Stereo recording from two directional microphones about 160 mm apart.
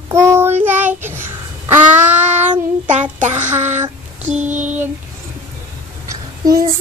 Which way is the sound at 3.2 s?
50° right (ahead or behind).